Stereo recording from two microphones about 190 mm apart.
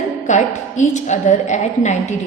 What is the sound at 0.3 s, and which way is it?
A woman's voice, 40° left (ahead or behind).